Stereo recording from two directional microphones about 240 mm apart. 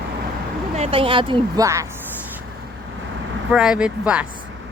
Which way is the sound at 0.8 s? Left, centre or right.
Right.